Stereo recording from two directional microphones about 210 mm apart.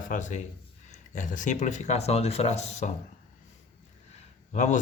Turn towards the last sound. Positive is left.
turn(degrees=35)  # may be behind; listen again after turning